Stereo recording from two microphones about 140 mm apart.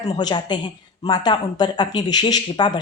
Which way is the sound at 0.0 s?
30° left (ahead or behind).